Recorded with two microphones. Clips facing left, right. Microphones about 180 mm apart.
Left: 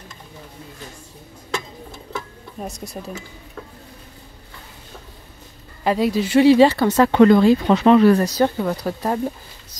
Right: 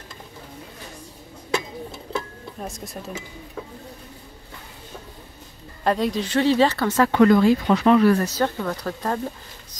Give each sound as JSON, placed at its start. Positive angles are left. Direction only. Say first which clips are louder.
{"t": 2.6, "sound": "speech", "louder": "left 3 dB", "side_deg": 0}
{"t": 5.9, "sound": "speech", "louder": "left 3 dB", "side_deg": 5}
{"t": 7.1, "sound": "speech", "louder": "left 3 dB", "side_deg": 25}